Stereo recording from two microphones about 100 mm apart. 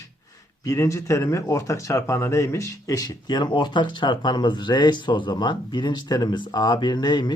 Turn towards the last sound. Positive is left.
turn(degrees=45)  # may be behind; listen again after turning